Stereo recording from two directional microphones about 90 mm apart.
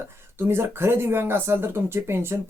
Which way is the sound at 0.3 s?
25° right (ahead or behind).